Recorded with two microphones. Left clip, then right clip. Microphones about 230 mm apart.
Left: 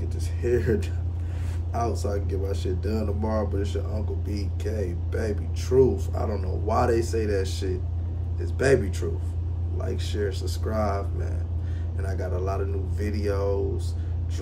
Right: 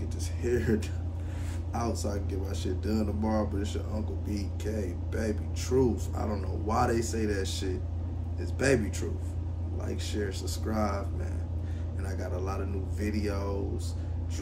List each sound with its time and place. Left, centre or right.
0.4 s speech: centre
9.8 s speech: centre